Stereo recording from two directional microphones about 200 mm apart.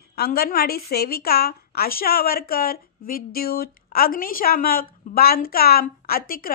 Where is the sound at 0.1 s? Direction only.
50° left (ahead or behind).